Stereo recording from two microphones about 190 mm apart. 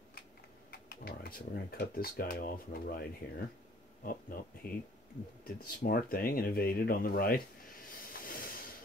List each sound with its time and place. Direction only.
0.7 s speech: 55° left (ahead or behind)
8.0 s hiss: 50° left (ahead or behind)